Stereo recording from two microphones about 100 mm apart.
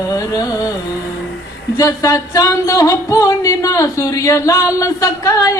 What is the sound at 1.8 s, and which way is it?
Music, 35° left (ahead or behind).